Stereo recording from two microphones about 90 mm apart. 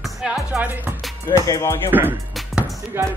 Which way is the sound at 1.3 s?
35° left (ahead or behind).